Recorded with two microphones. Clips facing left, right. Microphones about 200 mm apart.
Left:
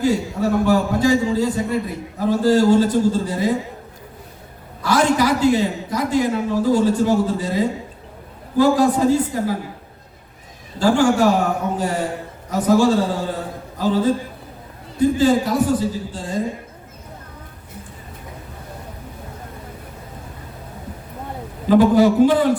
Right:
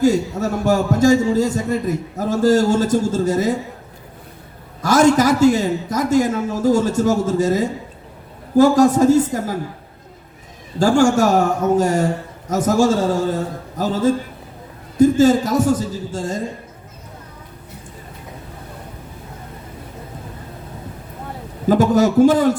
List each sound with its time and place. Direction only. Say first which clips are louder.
0.0 s a man's voice: right 2 dB; 45° right (ahead or behind)
4.8 s a man's voice: right 4 dB; 45° right (ahead or behind)
10.8 s a man's voice: right 2 dB; 45° right (ahead or behind)
21.7 s a man's voice: left 1 dB; 45° right (ahead or behind)